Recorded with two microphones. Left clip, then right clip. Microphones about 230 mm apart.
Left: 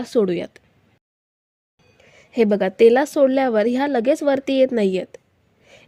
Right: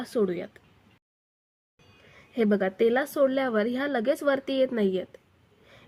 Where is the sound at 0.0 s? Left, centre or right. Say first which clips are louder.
Left 8 dB; left.